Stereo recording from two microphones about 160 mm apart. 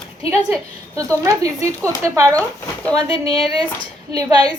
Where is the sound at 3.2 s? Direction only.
35° left (ahead or behind).